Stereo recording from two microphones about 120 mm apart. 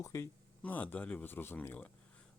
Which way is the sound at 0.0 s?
25° left (ahead or behind).